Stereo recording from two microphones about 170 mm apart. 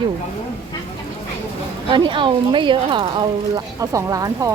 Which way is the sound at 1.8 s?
30° right (ahead or behind).